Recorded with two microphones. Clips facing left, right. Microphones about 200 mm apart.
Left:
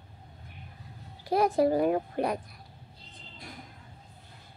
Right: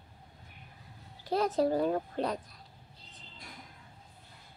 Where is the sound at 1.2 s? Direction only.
10° left (ahead or behind).